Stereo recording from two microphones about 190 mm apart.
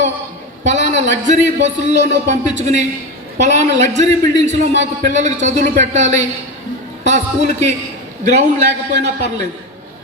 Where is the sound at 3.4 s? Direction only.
35° right (ahead or behind).